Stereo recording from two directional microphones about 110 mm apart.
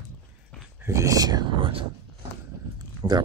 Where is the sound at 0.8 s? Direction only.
30° right (ahead or behind); by 1.8 s 50° right (ahead or behind).